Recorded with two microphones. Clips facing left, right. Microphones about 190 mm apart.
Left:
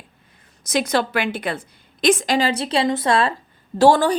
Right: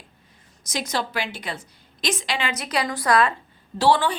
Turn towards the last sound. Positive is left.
turn(degrees=45)  # may be behind; listen again after turning